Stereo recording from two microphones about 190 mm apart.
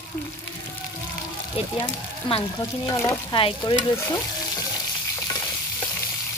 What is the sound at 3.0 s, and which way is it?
Stir, 15° left (ahead or behind).